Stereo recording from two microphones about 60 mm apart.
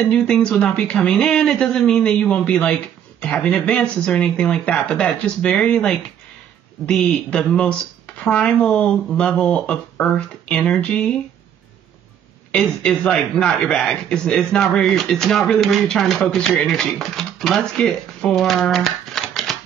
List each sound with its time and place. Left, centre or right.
0.1 s a man's voice: centre
12.4 s a man's voice: centre